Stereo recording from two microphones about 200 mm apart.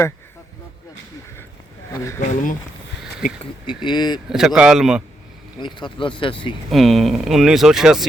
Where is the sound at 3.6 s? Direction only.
20° left (ahead or behind).